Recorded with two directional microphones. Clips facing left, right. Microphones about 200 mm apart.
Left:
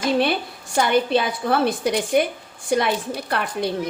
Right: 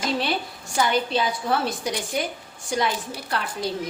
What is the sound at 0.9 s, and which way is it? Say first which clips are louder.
A woman's voice: left 6 dB; 60° left (ahead or behind).